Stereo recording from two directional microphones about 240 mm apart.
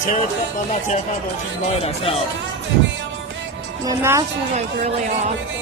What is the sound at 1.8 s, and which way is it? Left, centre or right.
Speech, left.